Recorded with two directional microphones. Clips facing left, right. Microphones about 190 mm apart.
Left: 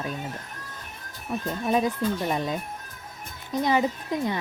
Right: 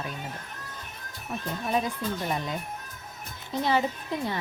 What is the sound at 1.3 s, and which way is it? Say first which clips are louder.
Speech: left 4 dB; 10° left (ahead or behind).